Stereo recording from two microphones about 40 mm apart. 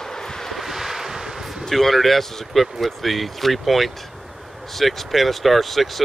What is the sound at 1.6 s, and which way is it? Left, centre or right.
Speech, centre.